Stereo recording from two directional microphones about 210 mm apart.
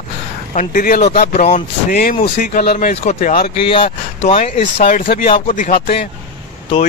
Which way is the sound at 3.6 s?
25° left (ahead or behind).